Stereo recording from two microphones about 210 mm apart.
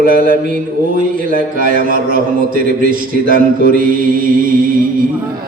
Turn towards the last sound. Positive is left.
turn(degrees=-40)  # may be behind; listen again after turning